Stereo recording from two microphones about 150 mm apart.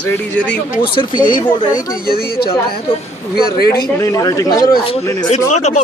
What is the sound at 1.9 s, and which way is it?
Speech, 90° left.